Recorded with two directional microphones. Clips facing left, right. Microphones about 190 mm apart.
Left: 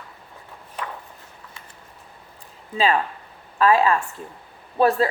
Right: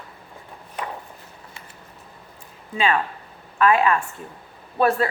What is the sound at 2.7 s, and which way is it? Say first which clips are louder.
A woman's voice: left 1 dB; 35° left (ahead or behind).